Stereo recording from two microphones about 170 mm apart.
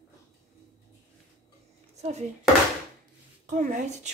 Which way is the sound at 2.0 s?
40° right (ahead or behind).